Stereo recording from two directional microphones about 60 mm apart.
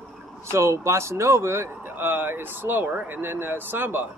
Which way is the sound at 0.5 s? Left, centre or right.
Right.